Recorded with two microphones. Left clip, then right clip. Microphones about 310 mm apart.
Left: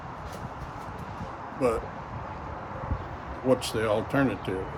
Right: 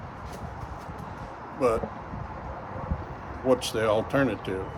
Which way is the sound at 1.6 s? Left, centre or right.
Centre.